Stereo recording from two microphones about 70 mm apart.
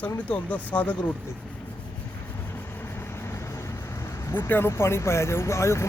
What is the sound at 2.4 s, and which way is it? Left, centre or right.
Vehicle, left.